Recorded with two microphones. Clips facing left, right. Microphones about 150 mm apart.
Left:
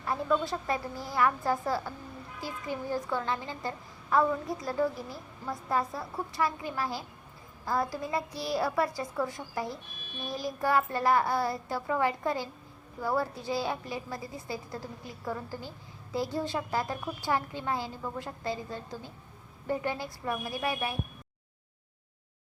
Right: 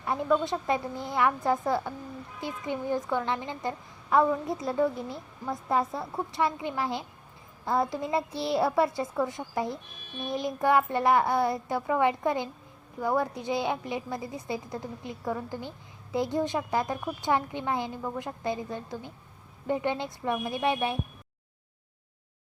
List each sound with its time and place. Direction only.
0.4 s a woman's voice: 20° right (ahead or behind)